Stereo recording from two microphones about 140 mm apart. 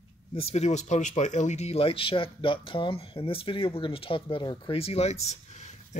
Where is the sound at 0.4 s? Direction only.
50° left (ahead or behind).